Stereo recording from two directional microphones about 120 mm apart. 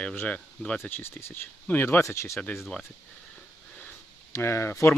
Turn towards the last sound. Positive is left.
turn(degrees=20)  # may be behind; listen again after turning